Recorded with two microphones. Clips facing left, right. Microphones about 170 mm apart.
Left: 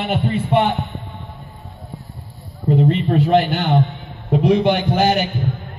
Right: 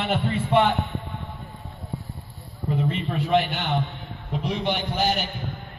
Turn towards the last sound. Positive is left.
turn(degrees=65)  # may be behind; listen again after turning